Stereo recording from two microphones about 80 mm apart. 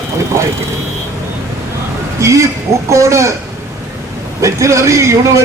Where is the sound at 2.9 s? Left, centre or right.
Right.